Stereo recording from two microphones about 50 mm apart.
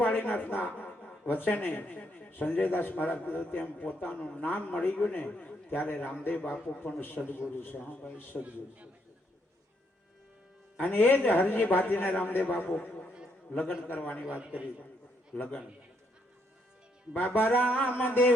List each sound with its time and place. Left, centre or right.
0.2 s a man's voice: left
6.1 s a man's voice: left
8.4 s a man's voice: right
10.8 s a man's voice: left
13.8 s a man's voice: left
14.3 s a man's voice: right
15.3 s a man's voice: centre
17.2 s a man's voice: left